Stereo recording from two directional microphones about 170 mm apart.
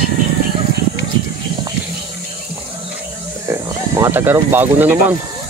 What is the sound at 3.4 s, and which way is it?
Speech, 15° right (ahead or behind).